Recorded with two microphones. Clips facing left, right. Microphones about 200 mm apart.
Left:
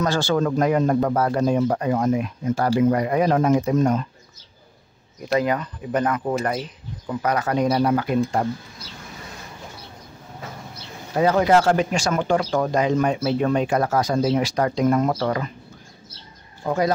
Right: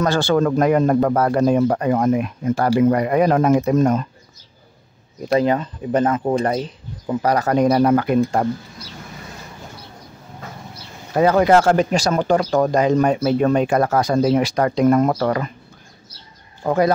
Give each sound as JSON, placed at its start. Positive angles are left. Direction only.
{"t": 0.0, "sound": "speech", "side_deg": -60}
{"t": 5.3, "sound": "speech", "side_deg": -30}
{"t": 7.6, "sound": "speech", "side_deg": -55}
{"t": 11.1, "sound": "speech", "side_deg": -60}
{"t": 16.6, "sound": "speech", "side_deg": -60}